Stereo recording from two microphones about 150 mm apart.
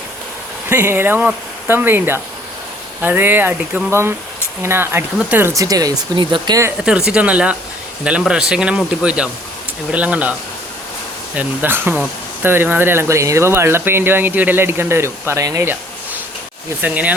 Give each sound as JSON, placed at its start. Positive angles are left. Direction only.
{"t": 0.7, "sound": "speech", "side_deg": -15}
{"t": 6.7, "sound": "speech", "side_deg": -5}
{"t": 11.3, "sound": "speech", "side_deg": -15}